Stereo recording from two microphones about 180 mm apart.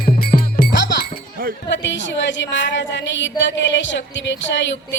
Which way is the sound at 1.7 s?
85° left.